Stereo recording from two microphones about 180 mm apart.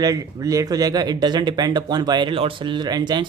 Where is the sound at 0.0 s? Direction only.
20° right (ahead or behind).